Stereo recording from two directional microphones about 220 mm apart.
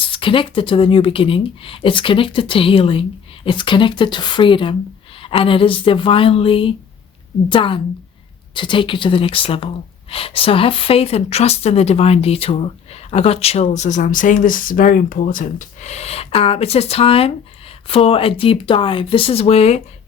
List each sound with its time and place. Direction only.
0.0 s speech: 25° left (ahead or behind)